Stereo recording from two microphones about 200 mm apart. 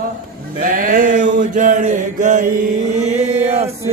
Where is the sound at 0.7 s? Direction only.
40° right (ahead or behind).